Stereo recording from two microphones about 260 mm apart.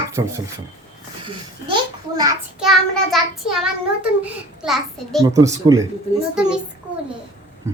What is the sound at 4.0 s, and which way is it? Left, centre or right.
A child's voice, centre.